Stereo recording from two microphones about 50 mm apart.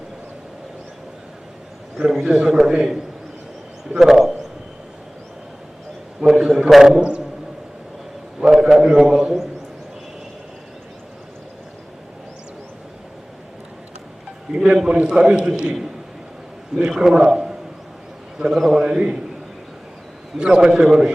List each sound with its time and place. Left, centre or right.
2.0 s a man's voice: centre
6.1 s a man's voice: centre
8.4 s a man's voice: centre
14.5 s a man's voice: centre
17.0 s a man's voice: centre
18.5 s a man's voice: centre
18.8 s a man's voice: centre
20.4 s a man's voice: centre